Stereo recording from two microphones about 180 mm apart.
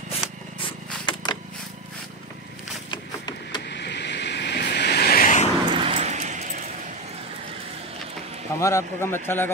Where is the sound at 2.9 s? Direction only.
25° left (ahead or behind).